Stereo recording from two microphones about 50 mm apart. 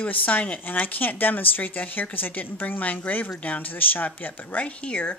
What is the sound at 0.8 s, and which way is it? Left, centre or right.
A woman's voice, left.